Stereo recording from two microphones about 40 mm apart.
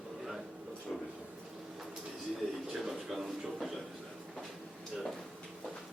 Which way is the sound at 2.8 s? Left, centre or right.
Centre.